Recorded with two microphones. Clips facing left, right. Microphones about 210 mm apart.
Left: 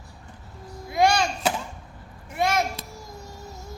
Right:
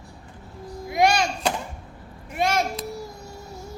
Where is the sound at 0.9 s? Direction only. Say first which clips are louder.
Even; 20° right (ahead or behind).